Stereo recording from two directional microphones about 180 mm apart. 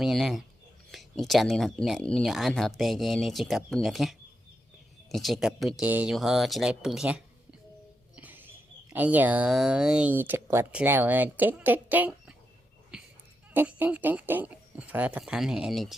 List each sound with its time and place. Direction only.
0.0 s speech: centre (ahead or behind)
5.1 s speech: centre (ahead or behind)
8.1 s a sound: 10° right (ahead or behind)
8.9 s speech: 10° right (ahead or behind)
12.9 s a sound: 5° right (ahead or behind)
13.5 s speech: 10° right (ahead or behind)